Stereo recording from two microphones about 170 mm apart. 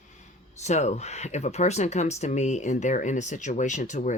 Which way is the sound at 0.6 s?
40° left (ahead or behind).